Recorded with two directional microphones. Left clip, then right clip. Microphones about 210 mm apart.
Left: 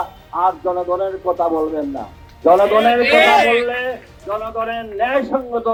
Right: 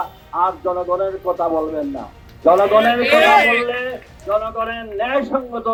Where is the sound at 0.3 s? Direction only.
35° left (ahead or behind).